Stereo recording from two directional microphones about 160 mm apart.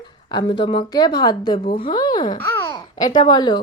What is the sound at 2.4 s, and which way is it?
A child's voice, 10° left (ahead or behind).